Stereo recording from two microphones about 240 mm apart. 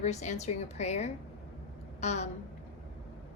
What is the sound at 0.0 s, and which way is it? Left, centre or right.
A woman's voice, left.